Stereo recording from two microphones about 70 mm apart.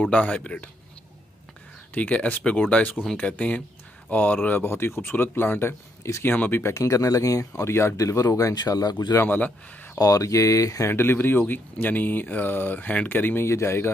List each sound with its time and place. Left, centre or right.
0.1 s speech: centre
2.0 s speech: centre
6.6 s speech: left
8.5 s speech: left
9.9 s speech: left
10.9 s speech: left
13.5 s speech: left